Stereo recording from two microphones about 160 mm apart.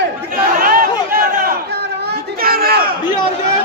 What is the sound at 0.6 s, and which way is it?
Chatter, 60° right (ahead or behind).